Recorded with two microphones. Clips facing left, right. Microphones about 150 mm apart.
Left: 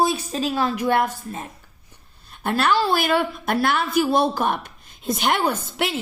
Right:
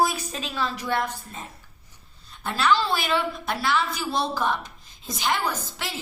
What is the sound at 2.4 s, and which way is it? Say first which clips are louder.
A woman's voice: left 3 dB; 55° left (ahead or behind).